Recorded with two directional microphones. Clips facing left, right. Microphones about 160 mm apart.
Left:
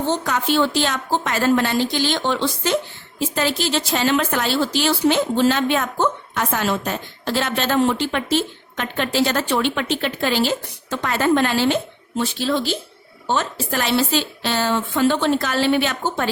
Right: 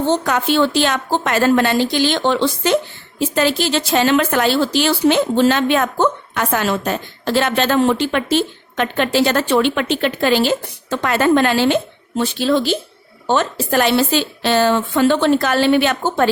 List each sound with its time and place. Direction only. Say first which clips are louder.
0.1 s a woman's voice: right 3 dB; 75° right (ahead or behind)
3.3 s a woman's voice: right 4 dB; 70° right (ahead or behind)